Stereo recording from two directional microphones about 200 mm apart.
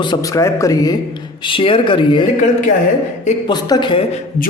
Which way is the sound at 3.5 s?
20° left (ahead or behind).